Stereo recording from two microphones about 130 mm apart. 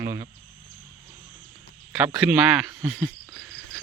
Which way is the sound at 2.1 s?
5° right (ahead or behind).